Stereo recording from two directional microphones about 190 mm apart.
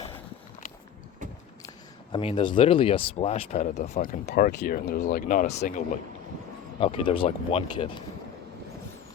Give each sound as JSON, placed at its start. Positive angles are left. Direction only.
{"t": 2.1, "sound": "speech", "side_deg": 25}
{"t": 4.4, "sound": "speech", "side_deg": 50}
{"t": 6.7, "sound": "speech", "side_deg": 30}